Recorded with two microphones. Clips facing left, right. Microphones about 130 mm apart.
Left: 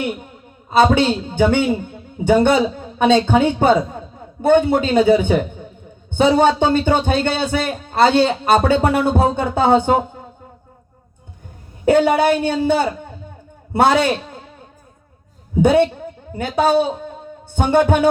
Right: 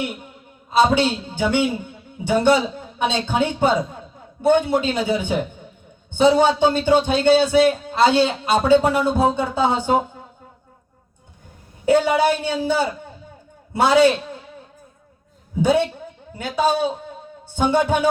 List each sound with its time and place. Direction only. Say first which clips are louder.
0.8 s a woman's voice: left 3 dB; 55° left (ahead or behind)
11.9 s a man's voice: left 3 dB; 55° left (ahead or behind)
15.6 s a man's voice: left 4 dB; 55° left (ahead or behind)
17.5 s music: left 3 dB; 55° left (ahead or behind)